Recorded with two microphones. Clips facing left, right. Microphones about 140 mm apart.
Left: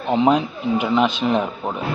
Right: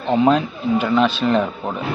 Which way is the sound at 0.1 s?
15° left (ahead or behind).